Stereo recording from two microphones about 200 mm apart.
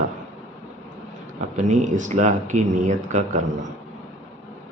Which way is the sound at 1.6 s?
35° right (ahead or behind).